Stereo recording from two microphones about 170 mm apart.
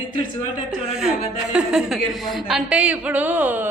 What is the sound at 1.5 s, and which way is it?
A woman's voice, 5° right (ahead or behind).